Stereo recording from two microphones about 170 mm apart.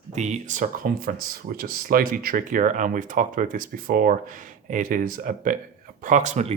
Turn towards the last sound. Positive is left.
turn(degrees=-45)  # may be behind; listen again after turning